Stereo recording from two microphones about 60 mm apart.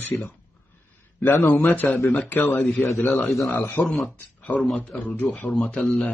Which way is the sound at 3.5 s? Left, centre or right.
Left.